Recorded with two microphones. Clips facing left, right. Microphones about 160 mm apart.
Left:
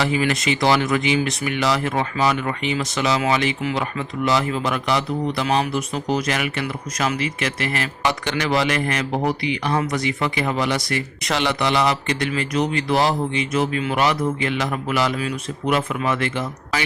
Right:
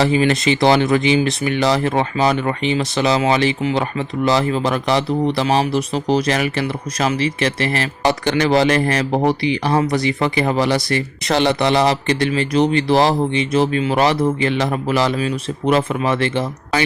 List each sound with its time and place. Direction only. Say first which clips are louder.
0.0 s speech: right 5 dB; 30° right (ahead or behind)